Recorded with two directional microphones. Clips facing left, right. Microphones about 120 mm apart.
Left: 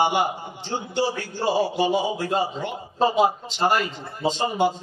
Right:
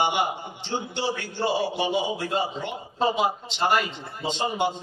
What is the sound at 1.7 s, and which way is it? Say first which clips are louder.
A man's voice: left 3 dB; 40° left (ahead or behind).